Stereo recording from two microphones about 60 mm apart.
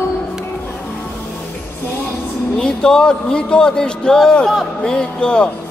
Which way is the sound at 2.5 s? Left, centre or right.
Centre.